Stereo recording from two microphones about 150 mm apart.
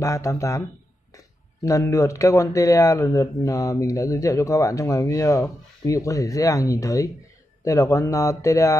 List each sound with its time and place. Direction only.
0.0 s speech: 20° left (ahead or behind)